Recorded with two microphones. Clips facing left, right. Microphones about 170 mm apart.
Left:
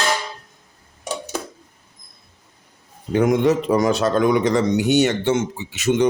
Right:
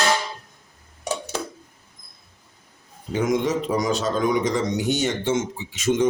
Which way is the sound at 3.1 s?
60° left (ahead or behind).